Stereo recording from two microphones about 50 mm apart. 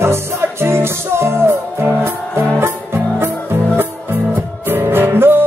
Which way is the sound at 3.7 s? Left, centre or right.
Right.